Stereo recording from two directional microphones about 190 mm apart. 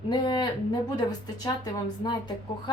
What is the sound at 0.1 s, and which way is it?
A woman's voice, 25° left (ahead or behind).